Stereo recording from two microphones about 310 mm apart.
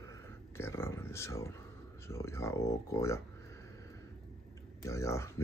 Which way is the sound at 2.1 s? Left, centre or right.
Centre.